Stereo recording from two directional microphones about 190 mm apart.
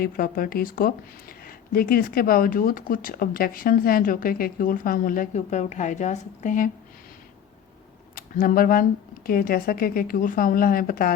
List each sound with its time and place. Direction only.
0.0 s speech: 50° left (ahead or behind)
8.1 s speech: 45° left (ahead or behind)